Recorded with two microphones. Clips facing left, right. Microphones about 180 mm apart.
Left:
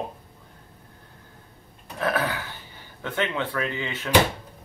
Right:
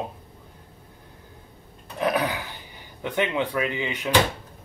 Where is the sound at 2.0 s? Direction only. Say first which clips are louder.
Right 2 dB; 15° right (ahead or behind).